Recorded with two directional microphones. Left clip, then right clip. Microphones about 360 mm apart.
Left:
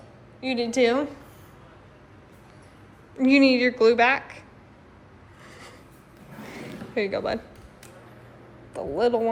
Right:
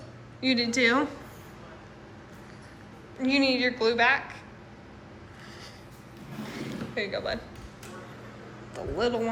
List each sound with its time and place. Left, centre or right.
0.4 s a woman's voice: centre
3.2 s a woman's voice: centre
6.5 s a sound: centre
8.7 s a woman's voice: centre